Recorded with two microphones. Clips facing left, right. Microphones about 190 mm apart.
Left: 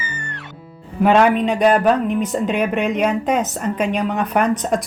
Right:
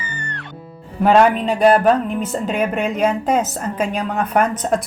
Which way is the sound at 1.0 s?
Centre (ahead or behind).